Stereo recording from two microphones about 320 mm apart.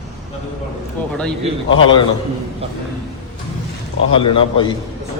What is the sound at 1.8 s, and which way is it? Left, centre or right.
Speech, centre.